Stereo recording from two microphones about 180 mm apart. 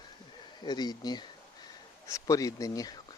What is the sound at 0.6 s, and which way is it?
Speech, 25° left (ahead or behind).